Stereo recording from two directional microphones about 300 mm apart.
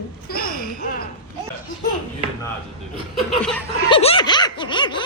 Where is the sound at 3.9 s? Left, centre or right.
Centre.